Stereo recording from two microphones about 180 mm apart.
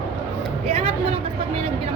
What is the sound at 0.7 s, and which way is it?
Speech, 35° right (ahead or behind).